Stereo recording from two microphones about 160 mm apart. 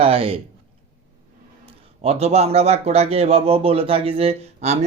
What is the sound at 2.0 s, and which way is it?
A man's voice, 40° right (ahead or behind).